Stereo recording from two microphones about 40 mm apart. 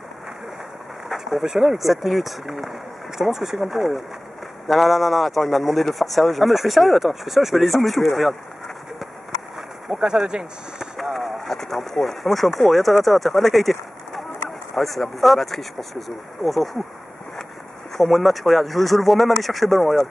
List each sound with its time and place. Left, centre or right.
1.0 s pigeon: centre
1.4 s speech: centre
10.0 s speech: right
11.1 s speech: centre
17.9 s speech: centre